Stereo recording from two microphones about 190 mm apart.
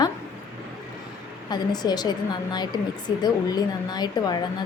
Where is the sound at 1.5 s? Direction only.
20° left (ahead or behind).